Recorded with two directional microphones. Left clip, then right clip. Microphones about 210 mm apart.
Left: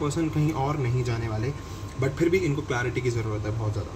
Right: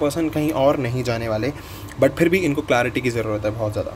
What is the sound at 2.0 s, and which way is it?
Speech, 40° right (ahead or behind).